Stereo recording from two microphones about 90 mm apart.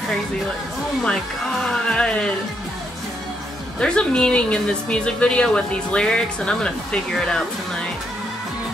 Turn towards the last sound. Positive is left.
turn(degrees=5)  # may be behind; listen again after turning